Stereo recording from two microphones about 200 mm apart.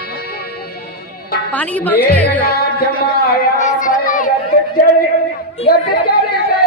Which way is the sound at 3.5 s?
40° left (ahead or behind).